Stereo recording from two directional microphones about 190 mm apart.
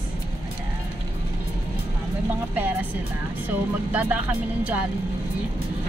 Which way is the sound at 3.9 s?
10° right (ahead or behind).